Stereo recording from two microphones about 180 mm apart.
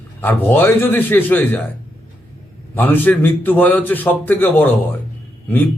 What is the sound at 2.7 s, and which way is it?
A man's voice, 10° left (ahead or behind).